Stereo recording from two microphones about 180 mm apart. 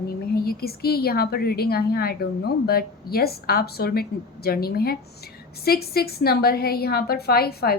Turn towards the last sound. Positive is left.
turn(degrees=60)  # may be behind; listen again after turning